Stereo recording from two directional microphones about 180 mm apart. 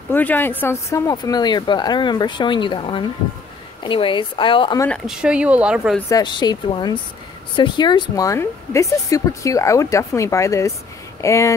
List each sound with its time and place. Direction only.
0.1 s speech: 10° left (ahead or behind); by 4.7 s 30° left (ahead or behind)
4.7 s speech: 10° left (ahead or behind)
5.0 s speech: 5° right (ahead or behind)
5.9 s speech: 20° left (ahead or behind)